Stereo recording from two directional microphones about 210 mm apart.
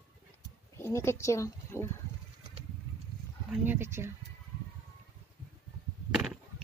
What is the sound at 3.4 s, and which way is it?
Speech, 10° right (ahead or behind).